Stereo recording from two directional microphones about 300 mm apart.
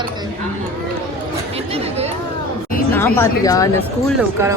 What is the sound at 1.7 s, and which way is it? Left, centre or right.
Speech, right.